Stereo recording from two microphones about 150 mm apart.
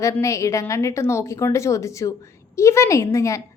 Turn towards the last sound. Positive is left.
turn(degrees=20)  # may be behind; listen again after turning